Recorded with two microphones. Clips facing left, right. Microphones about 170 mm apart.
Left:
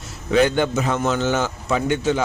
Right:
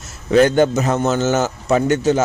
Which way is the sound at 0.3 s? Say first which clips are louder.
Right 5 dB; 45° right (ahead or behind).